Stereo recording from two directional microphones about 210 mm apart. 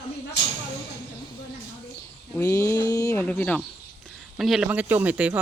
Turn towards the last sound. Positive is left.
turn(degrees=-5)  # may be behind; listen again after turning